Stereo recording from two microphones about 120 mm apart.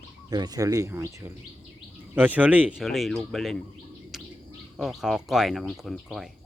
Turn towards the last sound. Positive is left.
turn(degrees=0)  # may be behind; listen again after turning